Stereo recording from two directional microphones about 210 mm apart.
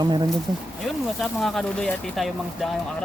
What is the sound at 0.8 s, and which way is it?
Speech, centre (ahead or behind).